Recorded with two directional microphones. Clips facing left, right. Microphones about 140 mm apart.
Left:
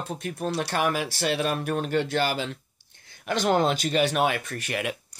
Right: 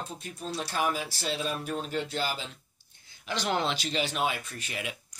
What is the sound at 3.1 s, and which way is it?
Speech, 55° left (ahead or behind).